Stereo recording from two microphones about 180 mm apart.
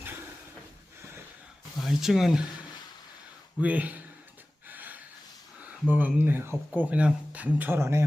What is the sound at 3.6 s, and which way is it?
Speech, 10° right (ahead or behind).